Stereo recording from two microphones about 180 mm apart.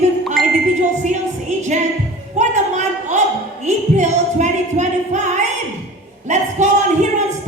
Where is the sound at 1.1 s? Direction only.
40° right (ahead or behind).